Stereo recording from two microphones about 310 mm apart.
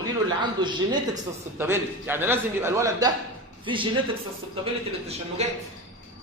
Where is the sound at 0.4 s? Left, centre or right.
Centre.